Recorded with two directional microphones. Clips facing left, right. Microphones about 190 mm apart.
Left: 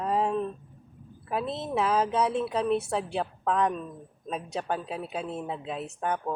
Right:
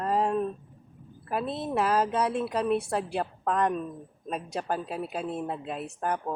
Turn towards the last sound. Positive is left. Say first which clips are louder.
# even
turn(degrees=-5)  # may be behind; listen again after turning